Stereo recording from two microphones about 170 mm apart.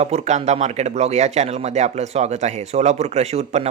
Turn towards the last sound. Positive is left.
turn(degrees=-40)  # may be behind; listen again after turning